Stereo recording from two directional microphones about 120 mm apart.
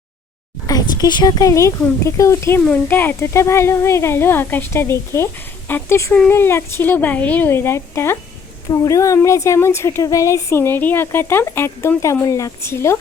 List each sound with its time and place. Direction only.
0.7 s speech: 35° left (ahead or behind)